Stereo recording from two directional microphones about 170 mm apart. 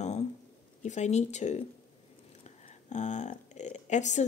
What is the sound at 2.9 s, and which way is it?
Speech, 45° left (ahead or behind).